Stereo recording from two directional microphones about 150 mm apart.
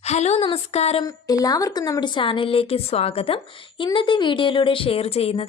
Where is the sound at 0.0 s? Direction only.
45° left (ahead or behind).